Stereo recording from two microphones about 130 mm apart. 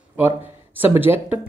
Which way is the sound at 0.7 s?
15° right (ahead or behind).